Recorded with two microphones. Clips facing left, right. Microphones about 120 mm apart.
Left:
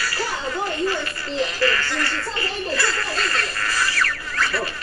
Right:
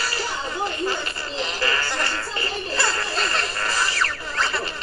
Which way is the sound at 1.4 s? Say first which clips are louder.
Left 4 dB; 25° right (ahead or behind).